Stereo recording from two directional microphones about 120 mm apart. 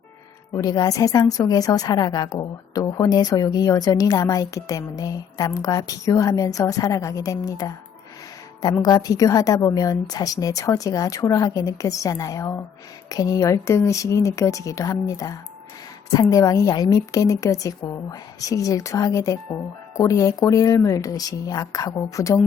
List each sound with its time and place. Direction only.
0.5 s a woman's voice: 30° left (ahead or behind)
8.8 s a woman's voice: 30° left (ahead or behind)